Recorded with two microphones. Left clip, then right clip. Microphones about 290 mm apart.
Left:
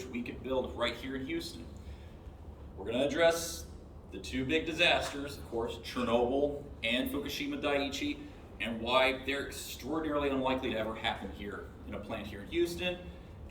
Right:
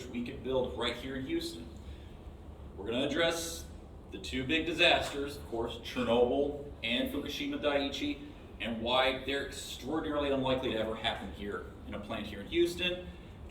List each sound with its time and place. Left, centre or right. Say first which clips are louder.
0.1 s a man's voice: right 2 dB; centre
2.8 s a man's voice: left 3 dB; centre